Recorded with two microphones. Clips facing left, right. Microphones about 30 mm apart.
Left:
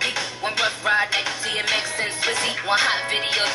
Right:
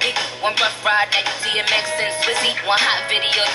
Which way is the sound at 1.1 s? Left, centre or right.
Right.